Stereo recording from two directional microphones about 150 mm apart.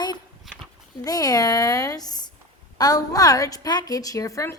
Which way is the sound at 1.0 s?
25° left (ahead or behind).